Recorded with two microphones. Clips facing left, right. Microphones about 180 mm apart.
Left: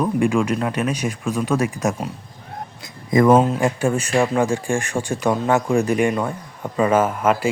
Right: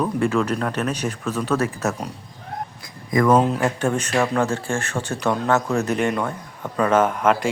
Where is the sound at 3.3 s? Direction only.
5° left (ahead or behind).